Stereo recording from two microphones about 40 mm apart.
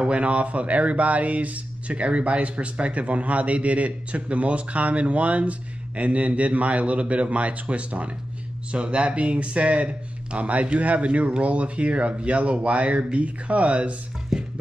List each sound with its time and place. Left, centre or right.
0.0 s speech: right
14.3 s music: centre